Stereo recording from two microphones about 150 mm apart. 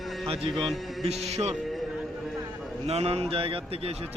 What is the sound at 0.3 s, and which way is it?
Speech, 40° right (ahead or behind).